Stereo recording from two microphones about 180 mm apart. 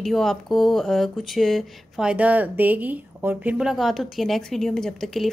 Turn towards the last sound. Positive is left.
turn(degrees=0)  # may be behind; listen again after turning